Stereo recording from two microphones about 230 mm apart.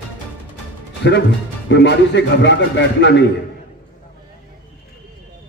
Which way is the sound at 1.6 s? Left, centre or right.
Left.